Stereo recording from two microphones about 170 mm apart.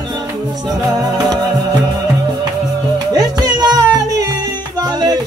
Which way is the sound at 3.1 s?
25° right (ahead or behind).